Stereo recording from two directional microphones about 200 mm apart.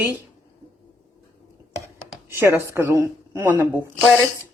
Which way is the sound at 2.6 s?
10° right (ahead or behind).